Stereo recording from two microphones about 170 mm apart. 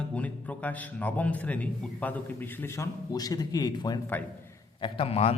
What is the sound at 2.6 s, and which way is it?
A man's voice, 20° left (ahead or behind).